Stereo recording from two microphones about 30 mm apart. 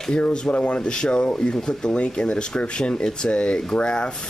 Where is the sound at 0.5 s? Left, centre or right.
Left.